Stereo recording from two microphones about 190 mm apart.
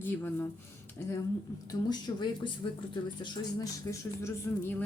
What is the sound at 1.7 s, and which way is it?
Speech, 20° left (ahead or behind).